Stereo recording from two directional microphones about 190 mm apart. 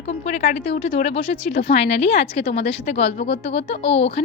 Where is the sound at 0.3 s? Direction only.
35° left (ahead or behind).